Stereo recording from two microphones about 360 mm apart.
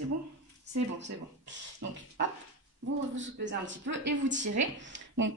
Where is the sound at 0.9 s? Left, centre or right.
Right.